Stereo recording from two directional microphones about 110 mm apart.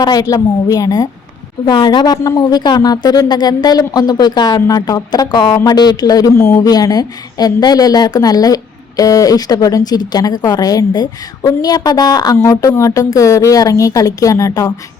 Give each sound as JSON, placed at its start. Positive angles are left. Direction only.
{"t": 0.0, "sound": "speech", "side_deg": 35}